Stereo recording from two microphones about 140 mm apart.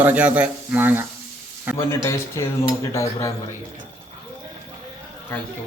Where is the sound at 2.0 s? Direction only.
20° left (ahead or behind).